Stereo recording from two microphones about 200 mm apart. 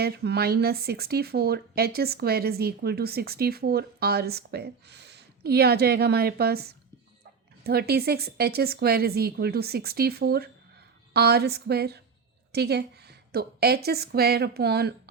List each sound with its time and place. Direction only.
0.0 s a woman's voice: 55° right (ahead or behind)